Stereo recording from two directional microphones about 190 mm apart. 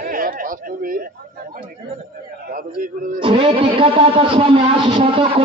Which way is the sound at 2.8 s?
45° right (ahead or behind).